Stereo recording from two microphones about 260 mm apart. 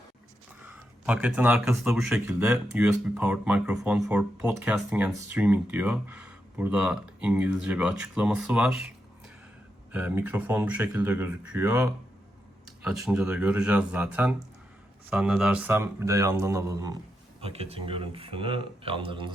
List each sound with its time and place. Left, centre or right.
0.6 s speech: centre
9.9 s speech: centre
17.4 s speech: right